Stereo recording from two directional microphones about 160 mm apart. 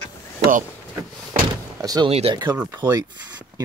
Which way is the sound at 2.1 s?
40° right (ahead or behind).